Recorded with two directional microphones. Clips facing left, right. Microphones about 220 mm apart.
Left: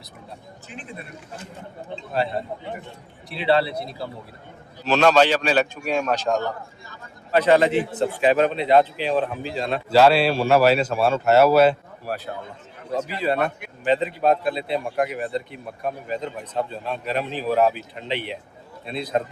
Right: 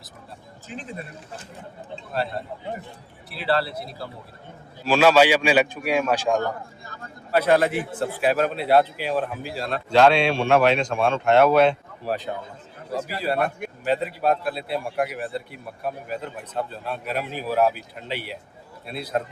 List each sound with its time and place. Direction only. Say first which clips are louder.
0.7 s speech: right 4 dB; 35° right (ahead or behind)
2.1 s a man's voice: left 3 dB; centre (ahead or behind)
13.8 s a man's voice: left 3 dB; 5° right (ahead or behind)